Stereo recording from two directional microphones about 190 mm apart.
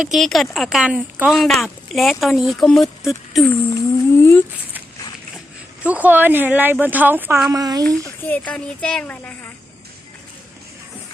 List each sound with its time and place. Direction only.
0.1 s speech: centre (ahead or behind)
5.8 s speech: 10° right (ahead or behind)
7.5 s speech: 20° right (ahead or behind)
8.0 s speech: 10° left (ahead or behind)